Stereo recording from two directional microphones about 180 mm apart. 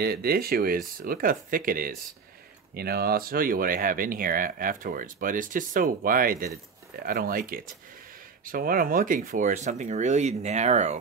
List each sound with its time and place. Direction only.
0.0 s speech: 60° right (ahead or behind); by 11.0 s 40° right (ahead or behind)